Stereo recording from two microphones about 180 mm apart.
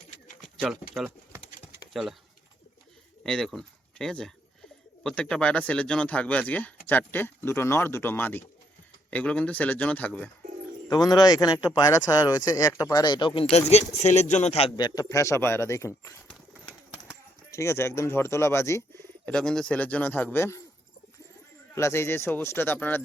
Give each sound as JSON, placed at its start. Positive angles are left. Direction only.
{"t": 0.4, "sound": "pigeon", "side_deg": -5}
{"t": 1.9, "sound": "speech", "side_deg": 0}
{"t": 3.2, "sound": "speech", "side_deg": 0}
{"t": 10.8, "sound": "speech", "side_deg": 20}
{"t": 14.8, "sound": "speech", "side_deg": 20}
{"t": 17.5, "sound": "speech", "side_deg": 15}
{"t": 21.8, "sound": "speech", "side_deg": 15}